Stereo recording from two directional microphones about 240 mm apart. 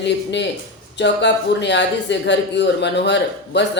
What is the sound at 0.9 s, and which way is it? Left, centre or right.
Speech, left.